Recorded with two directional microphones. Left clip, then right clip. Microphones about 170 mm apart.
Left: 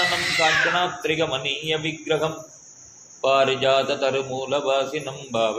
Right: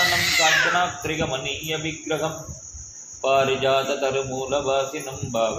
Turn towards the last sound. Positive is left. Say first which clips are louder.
# left 1 dB
turn(degrees=60)  # may be behind; listen again after turning